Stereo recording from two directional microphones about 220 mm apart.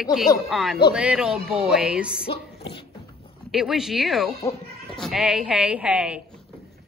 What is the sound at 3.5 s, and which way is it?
Speech, centre (ahead or behind).